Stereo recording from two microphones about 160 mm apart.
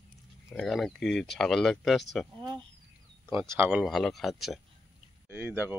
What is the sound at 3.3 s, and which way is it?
Speech, 15° right (ahead or behind).